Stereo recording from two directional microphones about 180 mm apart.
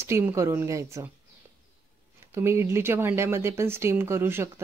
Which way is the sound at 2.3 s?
15° right (ahead or behind).